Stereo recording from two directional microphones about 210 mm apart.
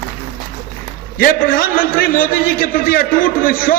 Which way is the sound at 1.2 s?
45° left (ahead or behind).